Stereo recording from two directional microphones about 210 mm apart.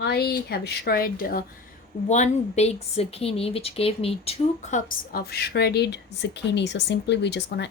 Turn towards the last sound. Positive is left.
turn(degrees=55)  # may be behind; listen again after turning